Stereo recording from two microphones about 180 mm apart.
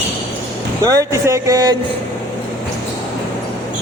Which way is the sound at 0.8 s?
20° right (ahead or behind).